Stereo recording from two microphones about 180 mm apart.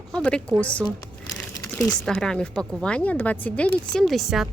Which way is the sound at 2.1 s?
5° left (ahead or behind).